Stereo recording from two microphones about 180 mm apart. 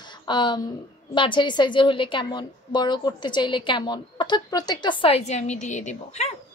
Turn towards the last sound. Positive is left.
turn(degrees=40)  # may be behind; listen again after turning